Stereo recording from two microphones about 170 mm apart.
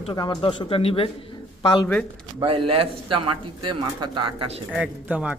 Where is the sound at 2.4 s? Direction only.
30° right (ahead or behind).